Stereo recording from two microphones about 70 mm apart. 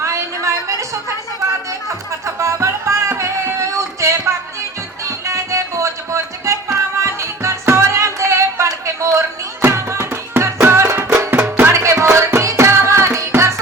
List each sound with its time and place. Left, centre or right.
0.0 s a sound: right
1.9 s music: right
11.7 s music: right